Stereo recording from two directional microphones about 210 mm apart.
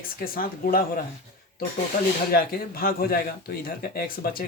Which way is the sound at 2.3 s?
45° left (ahead or behind).